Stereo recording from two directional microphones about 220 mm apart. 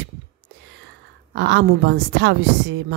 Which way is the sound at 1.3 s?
55° right (ahead or behind).